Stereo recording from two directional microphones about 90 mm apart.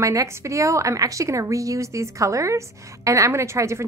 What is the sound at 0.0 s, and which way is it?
Speech, 35° right (ahead or behind).